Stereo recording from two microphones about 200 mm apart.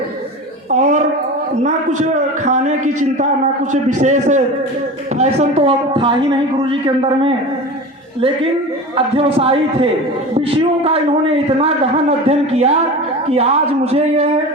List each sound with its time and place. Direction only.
0.7 s a sound: 35° right (ahead or behind)
1.6 s a man's voice: 35° right (ahead or behind)
9.0 s a man's voice: 25° right (ahead or behind)